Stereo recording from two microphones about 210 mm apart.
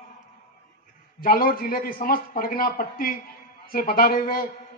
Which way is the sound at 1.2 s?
45° left (ahead or behind).